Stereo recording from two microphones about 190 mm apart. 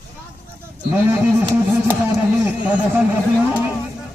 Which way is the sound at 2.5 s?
5° right (ahead or behind).